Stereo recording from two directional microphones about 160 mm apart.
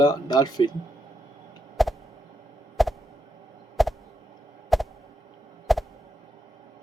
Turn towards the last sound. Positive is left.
turn(degrees=0)  # may be behind; listen again after turning